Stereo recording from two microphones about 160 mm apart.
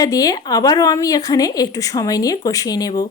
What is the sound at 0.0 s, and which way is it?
A woman's voice, 25° left (ahead or behind).